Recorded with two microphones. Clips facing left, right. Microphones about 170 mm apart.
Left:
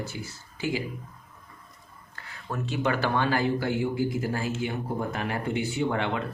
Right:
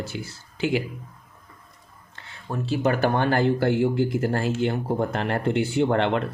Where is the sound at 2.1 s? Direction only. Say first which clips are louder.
Right 3 dB; 25° right (ahead or behind); by 6.2 s 65° right (ahead or behind).